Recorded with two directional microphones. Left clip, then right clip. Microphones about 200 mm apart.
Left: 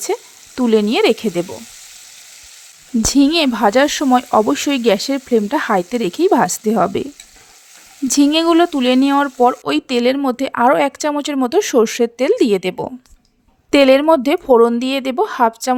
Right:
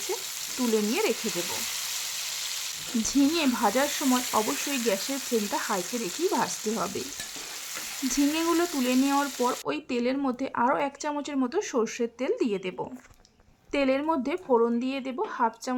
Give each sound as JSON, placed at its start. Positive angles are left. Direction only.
{"t": 0.1, "sound": "speech", "side_deg": 40}
{"t": 3.0, "sound": "speech", "side_deg": 40}
{"t": 8.1, "sound": "speech", "side_deg": 40}